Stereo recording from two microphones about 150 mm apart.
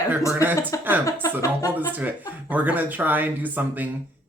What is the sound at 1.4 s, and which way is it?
Speech, 20° left (ahead or behind).